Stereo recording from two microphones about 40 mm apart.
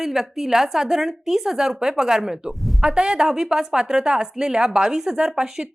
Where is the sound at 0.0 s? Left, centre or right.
Centre.